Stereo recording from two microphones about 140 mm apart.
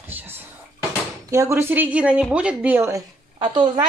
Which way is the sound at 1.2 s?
20° right (ahead or behind).